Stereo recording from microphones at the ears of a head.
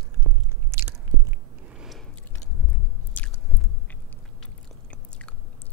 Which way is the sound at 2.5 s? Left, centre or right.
Left.